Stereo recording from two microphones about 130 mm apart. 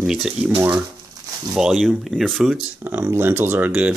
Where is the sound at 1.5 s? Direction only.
5° right (ahead or behind).